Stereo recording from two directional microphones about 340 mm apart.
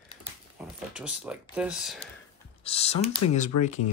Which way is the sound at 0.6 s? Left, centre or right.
Centre.